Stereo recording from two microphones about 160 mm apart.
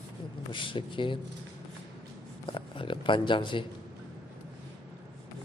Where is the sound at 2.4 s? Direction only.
30° left (ahead or behind).